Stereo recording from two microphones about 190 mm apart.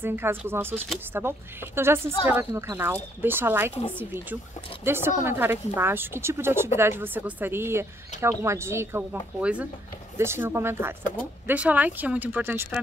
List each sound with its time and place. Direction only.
0.0 s speech: 10° right (ahead or behind)